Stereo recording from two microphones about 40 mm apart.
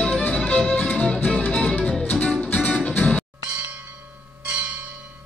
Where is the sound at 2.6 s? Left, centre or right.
Left.